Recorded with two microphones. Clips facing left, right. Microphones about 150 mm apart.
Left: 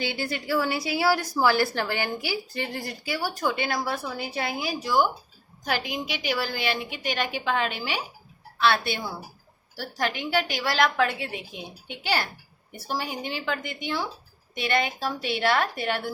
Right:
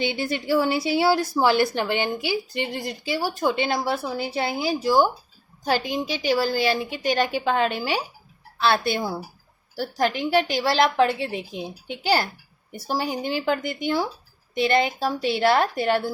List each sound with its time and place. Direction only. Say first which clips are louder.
0.0 s a woman's voice: right 4 dB; 20° right (ahead or behind)